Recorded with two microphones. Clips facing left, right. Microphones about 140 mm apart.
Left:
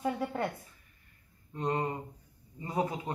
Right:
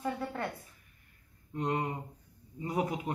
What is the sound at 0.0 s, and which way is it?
Speech, 25° left (ahead or behind).